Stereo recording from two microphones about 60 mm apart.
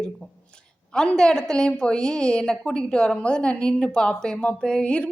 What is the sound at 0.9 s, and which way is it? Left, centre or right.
A woman's voice, centre.